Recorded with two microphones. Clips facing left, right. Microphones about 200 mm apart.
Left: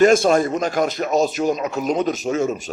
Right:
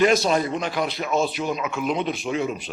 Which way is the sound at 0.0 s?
50° left (ahead or behind).